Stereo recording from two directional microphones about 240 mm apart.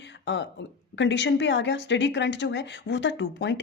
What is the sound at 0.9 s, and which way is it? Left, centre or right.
Speech, left.